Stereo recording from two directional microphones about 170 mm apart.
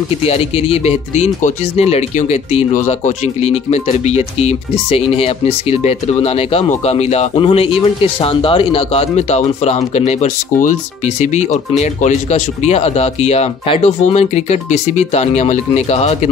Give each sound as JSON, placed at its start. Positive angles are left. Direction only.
{"t": 0.1, "sound": "speech", "side_deg": 35}